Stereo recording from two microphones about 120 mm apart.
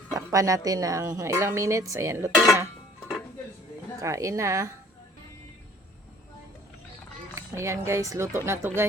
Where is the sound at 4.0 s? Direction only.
25° right (ahead or behind).